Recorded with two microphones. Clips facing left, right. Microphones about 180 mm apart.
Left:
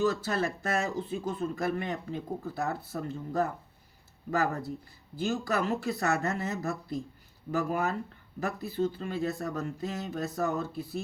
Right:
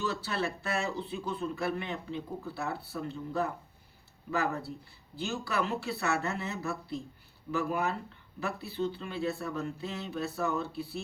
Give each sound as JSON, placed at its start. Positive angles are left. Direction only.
{"t": 0.0, "sound": "speech", "side_deg": 45}